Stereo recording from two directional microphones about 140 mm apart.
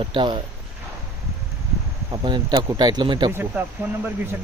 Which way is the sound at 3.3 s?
15° right (ahead or behind).